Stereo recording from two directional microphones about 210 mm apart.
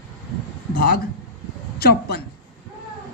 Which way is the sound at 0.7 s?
45° left (ahead or behind).